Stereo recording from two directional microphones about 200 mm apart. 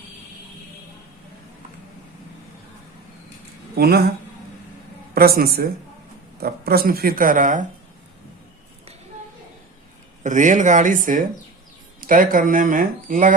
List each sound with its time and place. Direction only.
3.8 s speech: 50° right (ahead or behind)
5.1 s speech: 50° right (ahead or behind)
10.2 s speech: 40° right (ahead or behind)